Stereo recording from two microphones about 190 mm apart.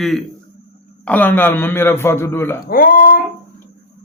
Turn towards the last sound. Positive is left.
turn(degrees=50)  # may be behind; listen again after turning